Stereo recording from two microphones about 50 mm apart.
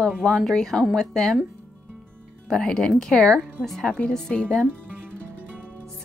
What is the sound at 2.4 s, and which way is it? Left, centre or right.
Speech, centre.